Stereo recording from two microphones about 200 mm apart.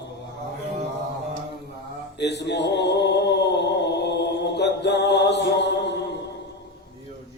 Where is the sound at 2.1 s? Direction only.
60° left (ahead or behind).